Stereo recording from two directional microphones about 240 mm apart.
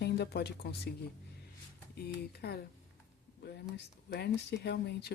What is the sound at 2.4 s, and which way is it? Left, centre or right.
Speech, left.